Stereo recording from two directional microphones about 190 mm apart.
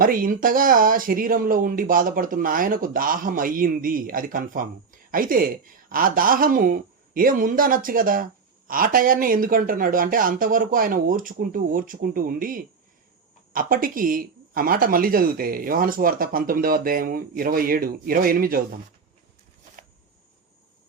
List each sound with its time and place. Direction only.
0.0 s speech: 50° right (ahead or behind)